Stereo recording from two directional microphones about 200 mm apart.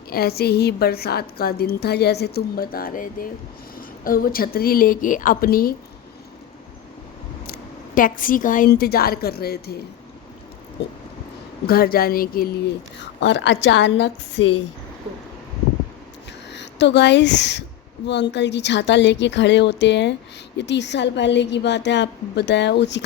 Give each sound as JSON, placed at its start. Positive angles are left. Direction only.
{"t": 0.1, "sound": "a woman's voice", "side_deg": 50}
{"t": 7.4, "sound": "a woman's voice", "side_deg": 45}
{"t": 11.6, "sound": "a woman's voice", "side_deg": 50}
{"t": 13.1, "sound": "a woman's voice", "side_deg": 60}
{"t": 16.5, "sound": "a woman's voice", "side_deg": 60}